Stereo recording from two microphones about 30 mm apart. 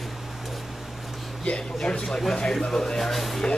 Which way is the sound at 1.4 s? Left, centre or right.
Left.